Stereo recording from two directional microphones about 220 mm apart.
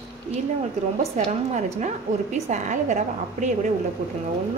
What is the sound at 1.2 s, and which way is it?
A woman's voice, 35° right (ahead or behind).